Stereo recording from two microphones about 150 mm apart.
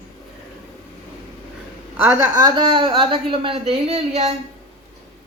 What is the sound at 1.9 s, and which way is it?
A woman's voice, 20° right (ahead or behind).